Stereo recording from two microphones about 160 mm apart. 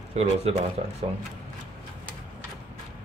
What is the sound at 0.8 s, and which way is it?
Speech, 50° right (ahead or behind).